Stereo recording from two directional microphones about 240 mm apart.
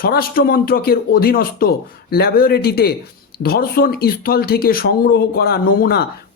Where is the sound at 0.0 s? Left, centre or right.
Left.